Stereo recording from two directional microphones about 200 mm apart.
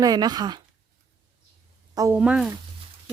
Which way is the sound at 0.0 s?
20° right (ahead or behind).